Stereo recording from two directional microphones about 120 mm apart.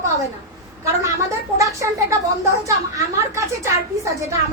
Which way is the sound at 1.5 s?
25° right (ahead or behind).